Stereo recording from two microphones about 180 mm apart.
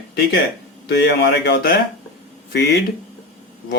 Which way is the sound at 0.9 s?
65° left (ahead or behind).